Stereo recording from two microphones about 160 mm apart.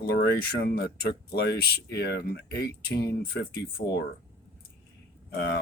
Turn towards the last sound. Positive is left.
turn(degrees=90)